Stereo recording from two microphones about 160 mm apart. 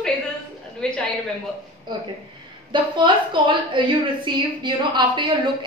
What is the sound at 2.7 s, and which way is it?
A woman's voice, 30° right (ahead or behind).